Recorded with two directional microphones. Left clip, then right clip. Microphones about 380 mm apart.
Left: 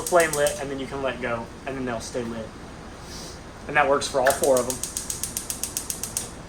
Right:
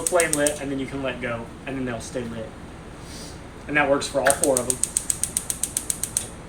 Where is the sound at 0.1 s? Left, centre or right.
Left.